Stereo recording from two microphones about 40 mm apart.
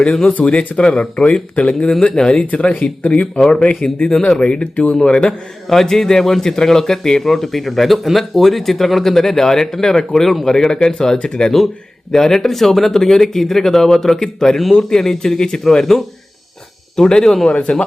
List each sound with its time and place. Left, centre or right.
0.4 s speech: left
1.9 s speech: centre
5.6 s speech: centre
17.5 s speech: left